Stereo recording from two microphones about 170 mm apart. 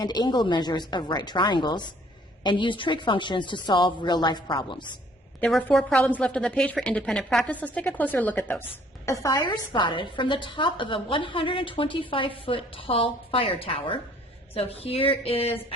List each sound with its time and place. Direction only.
0.0 s a woman's voice: 25° left (ahead or behind)
5.4 s a woman's voice: 5° left (ahead or behind)
9.2 s a woman's voice: 20° left (ahead or behind)